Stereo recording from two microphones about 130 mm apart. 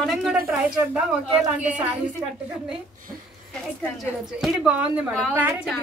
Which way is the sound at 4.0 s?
Centre (ahead or behind).